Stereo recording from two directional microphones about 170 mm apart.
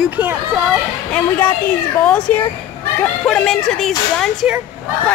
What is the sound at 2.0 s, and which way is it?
Speech, 10° left (ahead or behind).